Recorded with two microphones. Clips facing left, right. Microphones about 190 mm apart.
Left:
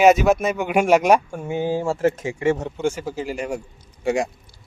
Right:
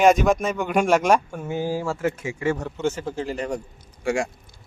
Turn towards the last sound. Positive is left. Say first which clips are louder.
# left 2 dB
turn(degrees=20)  # may be behind; listen again after turning